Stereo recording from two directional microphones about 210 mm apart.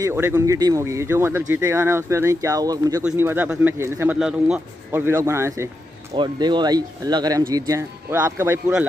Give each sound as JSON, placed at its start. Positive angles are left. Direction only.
{"t": 0.0, "sound": "speech", "side_deg": -10}